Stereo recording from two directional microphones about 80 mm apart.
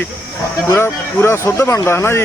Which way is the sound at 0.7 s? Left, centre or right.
Left.